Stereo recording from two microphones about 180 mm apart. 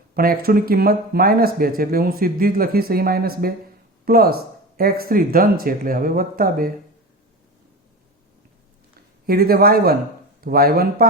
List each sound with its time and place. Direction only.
0.1 s speech: 55° right (ahead or behind)
9.2 s speech: 55° right (ahead or behind)